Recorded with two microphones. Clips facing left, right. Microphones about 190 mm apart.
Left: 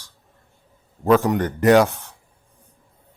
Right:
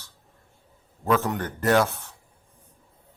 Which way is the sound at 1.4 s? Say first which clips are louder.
Left 6 dB; 15° left (ahead or behind).